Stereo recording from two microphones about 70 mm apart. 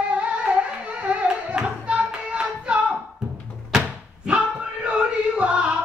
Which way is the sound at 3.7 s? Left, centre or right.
Centre.